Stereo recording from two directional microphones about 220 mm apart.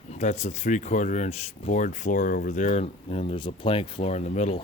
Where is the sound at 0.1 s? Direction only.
30° left (ahead or behind).